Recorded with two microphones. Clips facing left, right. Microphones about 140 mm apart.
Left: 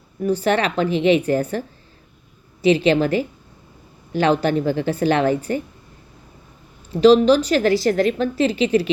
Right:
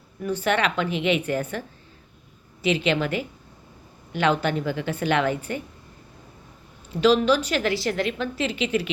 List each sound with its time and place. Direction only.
0.2 s a woman's voice: 35° left (ahead or behind)
7.0 s a woman's voice: 35° left (ahead or behind)